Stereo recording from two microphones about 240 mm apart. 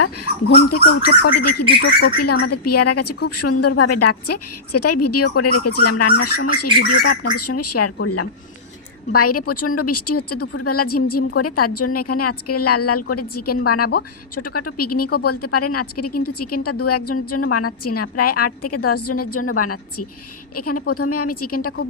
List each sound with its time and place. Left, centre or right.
0.7 s bird: left
1.8 s speech: left
2.4 s bird: left
3.2 s a woman's voice: left
7.9 s a woman's voice: left